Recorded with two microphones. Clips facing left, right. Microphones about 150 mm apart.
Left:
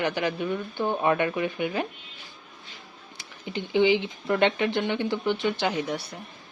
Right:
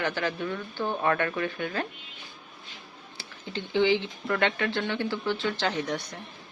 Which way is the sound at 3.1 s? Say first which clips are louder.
Left 3 dB; 15° left (ahead or behind).